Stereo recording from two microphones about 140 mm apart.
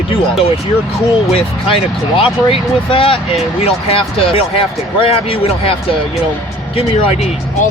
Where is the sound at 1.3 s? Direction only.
40° left (ahead or behind).